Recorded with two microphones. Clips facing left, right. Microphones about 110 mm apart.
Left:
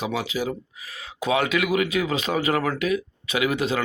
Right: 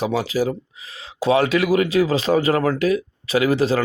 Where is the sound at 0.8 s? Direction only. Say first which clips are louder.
Right 7 dB; 25° right (ahead or behind).